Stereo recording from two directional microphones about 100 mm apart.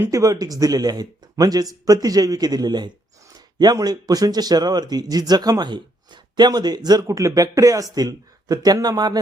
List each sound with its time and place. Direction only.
0.0 s speech: 30° right (ahead or behind)